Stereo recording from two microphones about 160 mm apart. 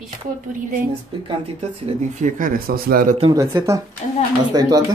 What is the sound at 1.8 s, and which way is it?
Speech, 55° right (ahead or behind).